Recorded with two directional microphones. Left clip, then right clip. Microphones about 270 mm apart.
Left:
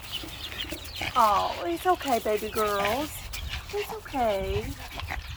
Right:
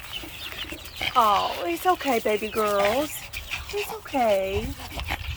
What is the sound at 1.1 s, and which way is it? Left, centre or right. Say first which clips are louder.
Speech: right 2 dB; right.